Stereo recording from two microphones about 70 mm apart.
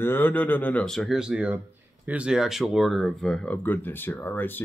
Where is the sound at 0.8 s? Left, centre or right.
Centre.